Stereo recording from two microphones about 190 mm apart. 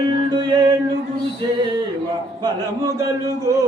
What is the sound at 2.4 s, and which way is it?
Speech, 20° right (ahead or behind).